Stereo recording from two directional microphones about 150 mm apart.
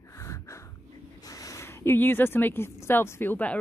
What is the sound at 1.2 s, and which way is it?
Speech, 20° left (ahead or behind).